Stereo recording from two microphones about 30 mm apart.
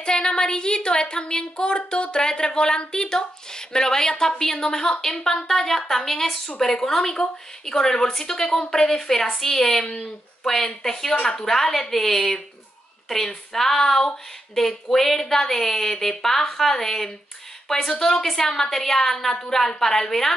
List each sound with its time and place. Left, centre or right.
0.0 s speech: left